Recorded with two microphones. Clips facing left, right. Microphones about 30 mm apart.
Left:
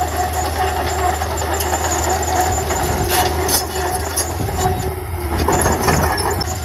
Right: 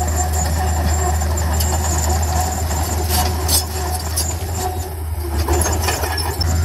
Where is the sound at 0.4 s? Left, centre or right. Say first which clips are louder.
Left 4 dB; left.